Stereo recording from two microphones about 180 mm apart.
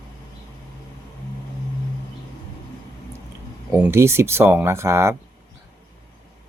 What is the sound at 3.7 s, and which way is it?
Speech, 15° right (ahead or behind).